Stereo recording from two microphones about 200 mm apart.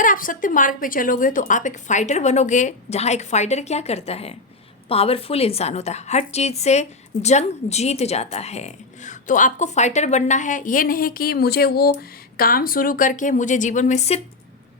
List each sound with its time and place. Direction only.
0.0 s a woman's voice: 40° left (ahead or behind)